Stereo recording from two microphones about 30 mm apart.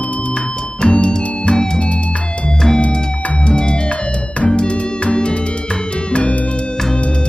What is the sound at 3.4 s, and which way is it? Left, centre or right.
Music, left.